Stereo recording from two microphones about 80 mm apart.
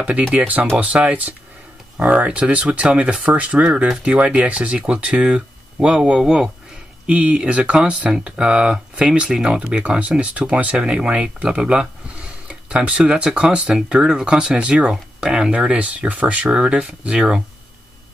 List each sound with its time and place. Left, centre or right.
0.3 s speech: centre